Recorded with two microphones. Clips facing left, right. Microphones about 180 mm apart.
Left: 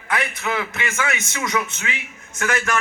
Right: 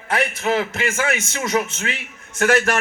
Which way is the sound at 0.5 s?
45° right (ahead or behind).